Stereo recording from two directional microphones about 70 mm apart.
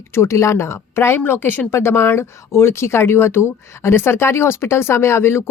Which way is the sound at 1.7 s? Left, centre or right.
Left.